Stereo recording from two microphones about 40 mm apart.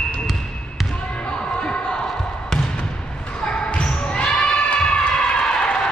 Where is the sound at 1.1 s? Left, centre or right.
Left.